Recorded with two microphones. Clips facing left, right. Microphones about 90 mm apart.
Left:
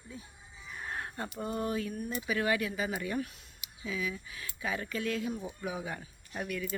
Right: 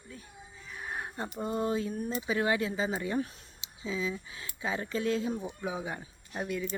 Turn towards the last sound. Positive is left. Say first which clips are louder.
# right 2 dB
turn(degrees=-20)  # may be behind; listen again after turning